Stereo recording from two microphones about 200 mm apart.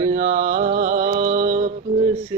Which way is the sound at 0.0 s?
20° right (ahead or behind).